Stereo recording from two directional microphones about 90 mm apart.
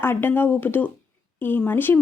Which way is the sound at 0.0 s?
25° left (ahead or behind).